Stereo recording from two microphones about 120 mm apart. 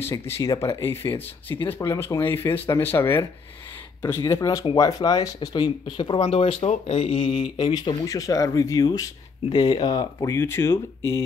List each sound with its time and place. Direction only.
0.2 s speech: 25° left (ahead or behind)
4.3 s speech: 25° left (ahead or behind); by 7.4 s 65° left (ahead or behind)
7.5 s speech: 35° left (ahead or behind)